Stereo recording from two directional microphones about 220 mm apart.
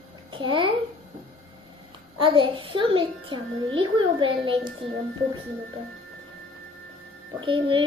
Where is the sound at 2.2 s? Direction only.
20° right (ahead or behind).